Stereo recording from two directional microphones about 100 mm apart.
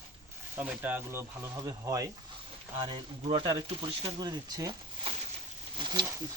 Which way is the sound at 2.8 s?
75° right (ahead or behind).